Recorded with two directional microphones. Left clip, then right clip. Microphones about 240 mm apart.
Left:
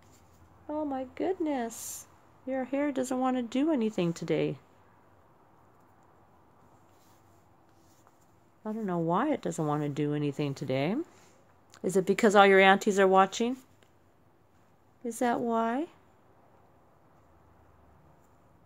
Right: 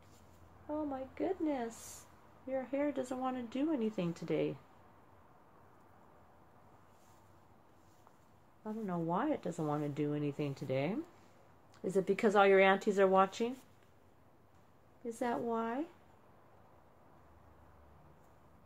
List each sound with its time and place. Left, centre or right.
0.7 s speech: left
8.6 s speech: left
15.0 s speech: left